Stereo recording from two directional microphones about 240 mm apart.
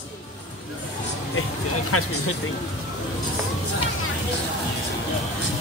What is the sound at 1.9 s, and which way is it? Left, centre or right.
Speech, left.